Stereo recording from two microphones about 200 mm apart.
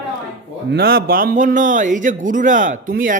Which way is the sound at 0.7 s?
50° right (ahead or behind).